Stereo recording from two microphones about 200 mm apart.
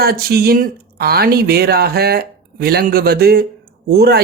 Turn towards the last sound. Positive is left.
turn(degrees=-50)  # may be behind; listen again after turning